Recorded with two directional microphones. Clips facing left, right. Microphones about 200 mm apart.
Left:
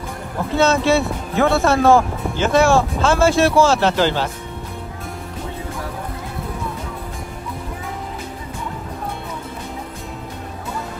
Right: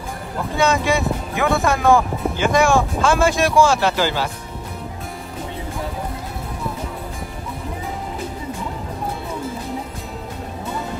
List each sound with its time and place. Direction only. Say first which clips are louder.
0.6 s speech: left 3 dB; 15° right (ahead or behind)